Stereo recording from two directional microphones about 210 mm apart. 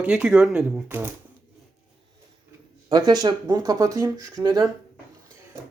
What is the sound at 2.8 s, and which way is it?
Speech, 20° right (ahead or behind).